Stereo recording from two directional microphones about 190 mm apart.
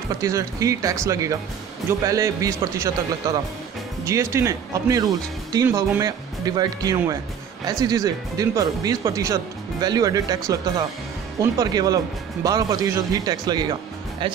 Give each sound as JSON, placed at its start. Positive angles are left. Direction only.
{"t": 0.2, "sound": "speech", "side_deg": -15}